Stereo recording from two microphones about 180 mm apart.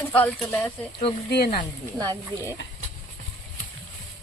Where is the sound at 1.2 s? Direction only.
65° left (ahead or behind).